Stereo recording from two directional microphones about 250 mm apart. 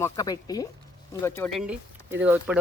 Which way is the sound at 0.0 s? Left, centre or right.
Centre.